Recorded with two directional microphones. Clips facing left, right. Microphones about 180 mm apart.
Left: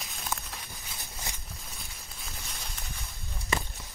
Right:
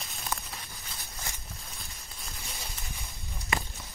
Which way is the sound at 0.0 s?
Centre (ahead or behind).